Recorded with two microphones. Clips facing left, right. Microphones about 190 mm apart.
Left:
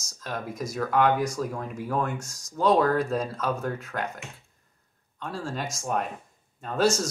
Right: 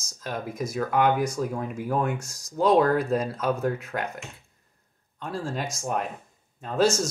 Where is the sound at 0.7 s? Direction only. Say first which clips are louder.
Even; 5° right (ahead or behind).